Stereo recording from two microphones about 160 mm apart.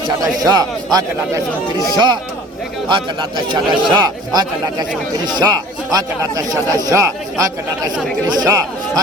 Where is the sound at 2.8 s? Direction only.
30° right (ahead or behind).